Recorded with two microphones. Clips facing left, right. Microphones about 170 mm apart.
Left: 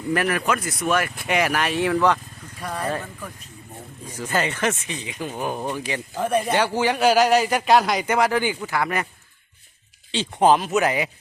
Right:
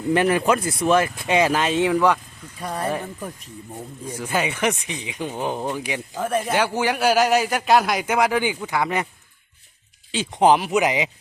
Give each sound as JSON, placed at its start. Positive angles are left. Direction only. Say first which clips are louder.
{"t": 0.1, "sound": "speech", "louder": "right 4 dB", "side_deg": -25}
{"t": 4.0, "sound": "speech", "louder": "even", "side_deg": -10}
{"t": 6.1, "sound": "speech", "louder": "left 1 dB", "side_deg": 0}
{"t": 10.3, "sound": "speech", "louder": "right 1 dB", "side_deg": -15}